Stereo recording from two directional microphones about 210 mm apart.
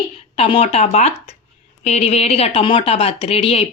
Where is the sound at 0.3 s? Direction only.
25° left (ahead or behind).